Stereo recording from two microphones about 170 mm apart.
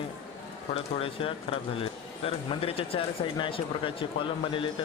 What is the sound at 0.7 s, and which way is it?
Speech, 35° left (ahead or behind).